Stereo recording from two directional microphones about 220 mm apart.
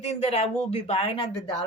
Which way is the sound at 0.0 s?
30° left (ahead or behind).